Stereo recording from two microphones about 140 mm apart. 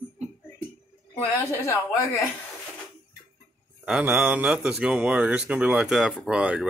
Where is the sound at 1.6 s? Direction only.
20° left (ahead or behind).